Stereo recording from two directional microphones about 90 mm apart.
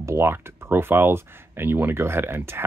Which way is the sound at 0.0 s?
30° right (ahead or behind).